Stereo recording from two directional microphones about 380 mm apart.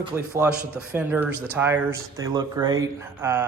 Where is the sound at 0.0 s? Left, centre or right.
Centre.